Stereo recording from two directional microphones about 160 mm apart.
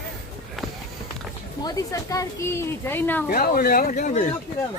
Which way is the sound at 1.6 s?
20° left (ahead or behind).